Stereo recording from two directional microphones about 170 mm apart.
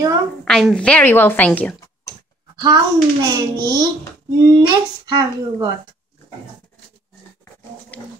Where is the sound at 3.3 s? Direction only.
25° right (ahead or behind).